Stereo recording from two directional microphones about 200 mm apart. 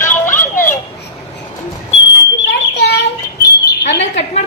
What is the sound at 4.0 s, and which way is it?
Bird, 30° left (ahead or behind).